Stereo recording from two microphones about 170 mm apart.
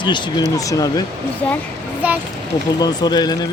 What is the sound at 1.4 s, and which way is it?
Speech, 10° left (ahead or behind).